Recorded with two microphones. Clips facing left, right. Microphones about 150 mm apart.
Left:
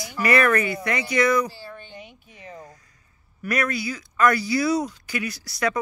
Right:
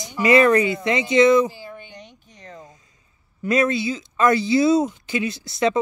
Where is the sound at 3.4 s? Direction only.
25° right (ahead or behind).